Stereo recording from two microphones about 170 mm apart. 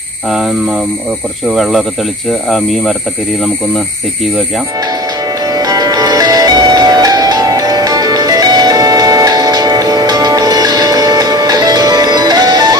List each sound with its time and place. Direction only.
1.5 s speech: centre (ahead or behind)
5.5 s music: 20° right (ahead or behind)